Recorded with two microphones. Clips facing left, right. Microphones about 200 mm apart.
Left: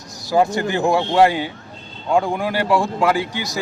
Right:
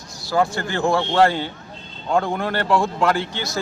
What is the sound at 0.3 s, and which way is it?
Speech, 20° left (ahead or behind).